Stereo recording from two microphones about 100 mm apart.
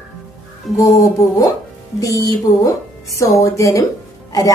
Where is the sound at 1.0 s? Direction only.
35° left (ahead or behind).